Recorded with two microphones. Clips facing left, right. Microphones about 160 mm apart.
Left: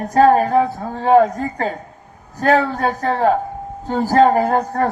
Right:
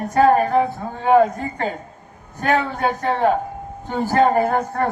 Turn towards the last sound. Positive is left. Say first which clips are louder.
# left 2 dB
turn(degrees=35)  # may be behind; listen again after turning